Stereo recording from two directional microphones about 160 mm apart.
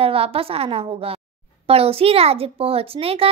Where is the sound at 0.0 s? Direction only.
35° right (ahead or behind).